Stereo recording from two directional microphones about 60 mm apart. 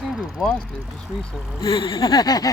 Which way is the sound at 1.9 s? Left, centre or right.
Left.